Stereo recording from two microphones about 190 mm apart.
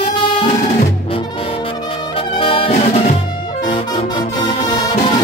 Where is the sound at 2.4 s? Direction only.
30° left (ahead or behind).